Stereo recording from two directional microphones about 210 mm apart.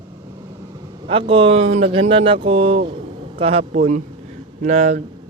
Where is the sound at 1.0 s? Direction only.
25° right (ahead or behind).